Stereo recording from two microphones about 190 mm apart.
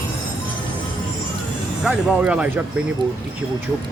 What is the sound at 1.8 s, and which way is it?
Speech, 5° right (ahead or behind).